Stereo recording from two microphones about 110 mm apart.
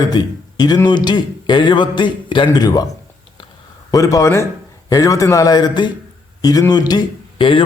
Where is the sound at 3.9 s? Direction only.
30° left (ahead or behind).